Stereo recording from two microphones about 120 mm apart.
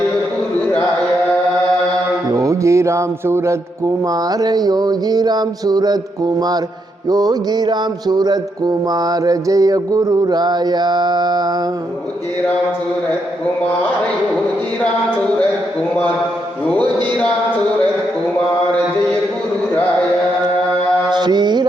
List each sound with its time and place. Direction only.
2.3 s speech: 25° right (ahead or behind)
7.1 s speech: 35° right (ahead or behind)
16.6 s a man's voice: 10° left (ahead or behind)
21.1 s mantra: 40° right (ahead or behind)